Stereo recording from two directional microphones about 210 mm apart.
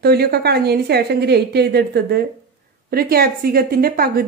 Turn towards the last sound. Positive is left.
turn(degrees=-45)  # may be behind; listen again after turning